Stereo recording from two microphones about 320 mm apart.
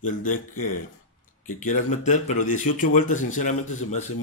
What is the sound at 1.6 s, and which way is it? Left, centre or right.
Speech, left.